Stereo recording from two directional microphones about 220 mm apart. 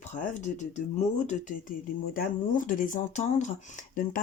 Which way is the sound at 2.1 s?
40° left (ahead or behind).